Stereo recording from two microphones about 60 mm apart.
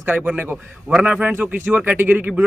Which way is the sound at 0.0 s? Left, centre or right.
Right.